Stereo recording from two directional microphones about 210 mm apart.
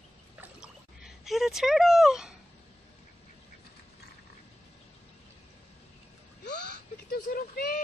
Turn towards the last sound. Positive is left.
turn(degrees=45)  # may be behind; listen again after turning